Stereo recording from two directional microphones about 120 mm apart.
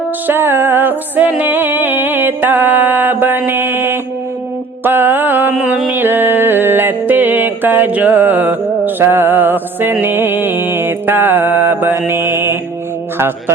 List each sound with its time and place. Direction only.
0.3 s music: 15° right (ahead or behind)
12.3 s mantra: 20° right (ahead or behind)